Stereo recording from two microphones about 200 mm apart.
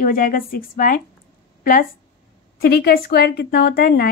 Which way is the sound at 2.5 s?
50° left (ahead or behind).